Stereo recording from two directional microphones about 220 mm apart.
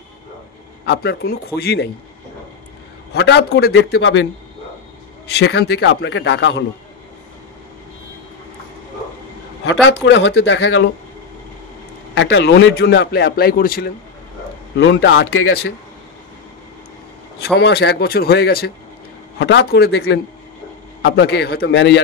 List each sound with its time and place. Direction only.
0.8 s a man's voice: 45° left (ahead or behind)
3.1 s a man's voice: 50° left (ahead or behind)
5.4 s a man's voice: 55° left (ahead or behind)
9.8 s speech: 55° left (ahead or behind)
12.2 s a man's voice: 55° left (ahead or behind)
17.6 s a man's voice: 50° left (ahead or behind)